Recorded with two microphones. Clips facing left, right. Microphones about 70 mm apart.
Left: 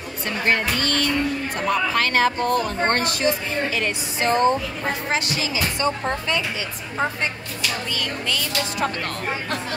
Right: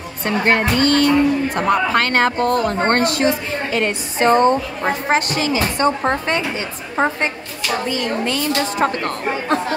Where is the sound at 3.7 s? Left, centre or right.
Right.